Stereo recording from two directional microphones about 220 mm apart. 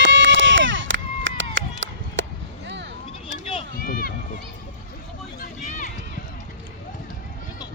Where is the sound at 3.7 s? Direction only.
40° left (ahead or behind).